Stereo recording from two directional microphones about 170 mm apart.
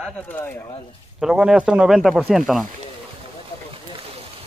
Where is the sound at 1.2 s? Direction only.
5° right (ahead or behind).